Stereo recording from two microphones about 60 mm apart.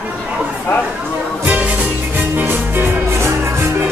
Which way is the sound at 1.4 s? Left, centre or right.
Right.